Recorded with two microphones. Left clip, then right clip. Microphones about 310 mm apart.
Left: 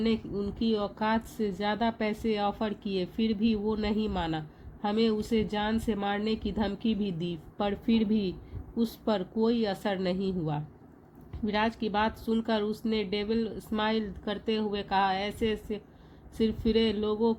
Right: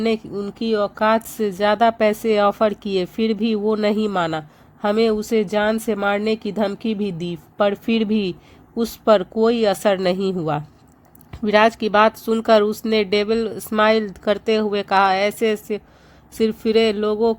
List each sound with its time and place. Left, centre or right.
0.0 s speech: right